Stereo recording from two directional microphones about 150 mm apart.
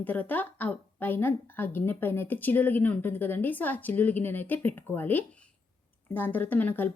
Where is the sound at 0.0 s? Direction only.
10° left (ahead or behind).